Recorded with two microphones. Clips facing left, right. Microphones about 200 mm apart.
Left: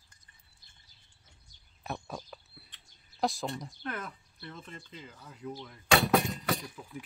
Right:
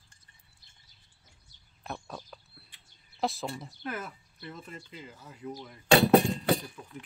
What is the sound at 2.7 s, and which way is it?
Speech, centre (ahead or behind).